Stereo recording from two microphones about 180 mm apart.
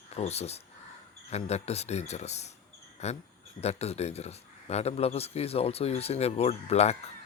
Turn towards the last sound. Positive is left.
turn(degrees=35)  # may be behind; listen again after turning